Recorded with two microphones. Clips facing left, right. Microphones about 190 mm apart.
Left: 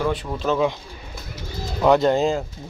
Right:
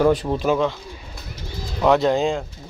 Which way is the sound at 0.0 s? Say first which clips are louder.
Right 7 dB; 40° right (ahead or behind).